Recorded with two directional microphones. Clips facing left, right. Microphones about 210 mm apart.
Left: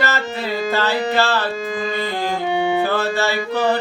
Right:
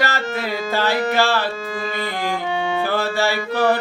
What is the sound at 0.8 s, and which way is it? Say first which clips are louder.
Music: right 2 dB; 15° right (ahead or behind).